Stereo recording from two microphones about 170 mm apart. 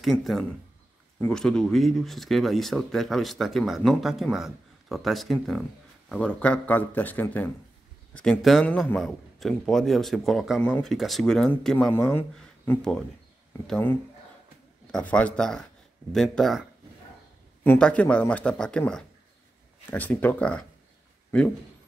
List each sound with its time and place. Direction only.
0.0 s speech: centre (ahead or behind)
11.9 s speech: 10° left (ahead or behind)
17.6 s speech: 5° left (ahead or behind)